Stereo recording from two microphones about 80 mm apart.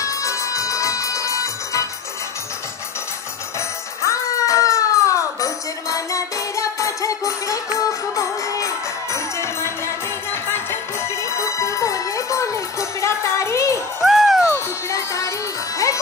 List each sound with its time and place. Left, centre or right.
0.0 s music: left
3.5 s music: left
14.0 s music: centre
14.4 s music: left